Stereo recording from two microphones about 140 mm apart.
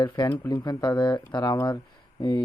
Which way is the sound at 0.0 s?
25° left (ahead or behind).